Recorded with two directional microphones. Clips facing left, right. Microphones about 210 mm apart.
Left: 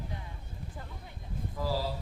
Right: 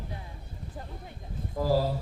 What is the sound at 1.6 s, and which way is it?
Speech, 45° right (ahead or behind).